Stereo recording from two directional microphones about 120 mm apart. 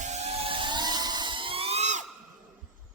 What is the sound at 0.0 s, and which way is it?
Vehicle, 70° right (ahead or behind).